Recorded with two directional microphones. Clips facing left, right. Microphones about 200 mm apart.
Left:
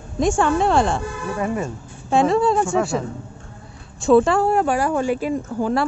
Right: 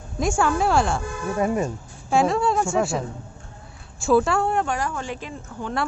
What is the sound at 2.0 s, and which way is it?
Speech, centre (ahead or behind).